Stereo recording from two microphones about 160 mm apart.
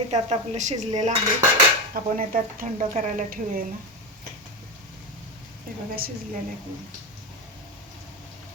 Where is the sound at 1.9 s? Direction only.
60° right (ahead or behind).